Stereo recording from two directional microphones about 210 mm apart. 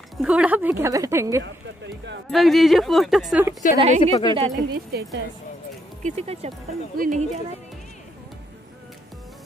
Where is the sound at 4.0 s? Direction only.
25° left (ahead or behind).